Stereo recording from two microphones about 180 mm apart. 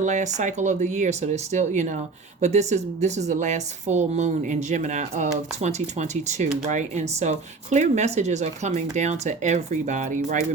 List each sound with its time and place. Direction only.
0.0 s speech: 40° right (ahead or behind)